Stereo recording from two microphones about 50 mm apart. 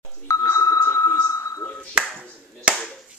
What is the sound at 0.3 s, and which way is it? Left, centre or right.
Sonar, left.